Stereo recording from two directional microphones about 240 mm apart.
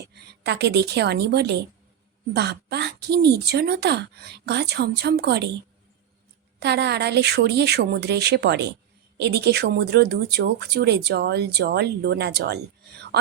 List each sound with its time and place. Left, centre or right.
0.1 s speech: right
6.6 s speech: right